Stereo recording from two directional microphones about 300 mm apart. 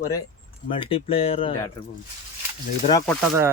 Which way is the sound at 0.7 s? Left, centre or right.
Centre.